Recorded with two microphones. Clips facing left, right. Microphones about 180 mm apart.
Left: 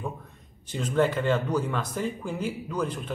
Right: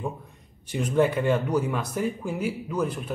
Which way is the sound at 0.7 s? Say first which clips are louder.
Right 2 dB; 10° right (ahead or behind).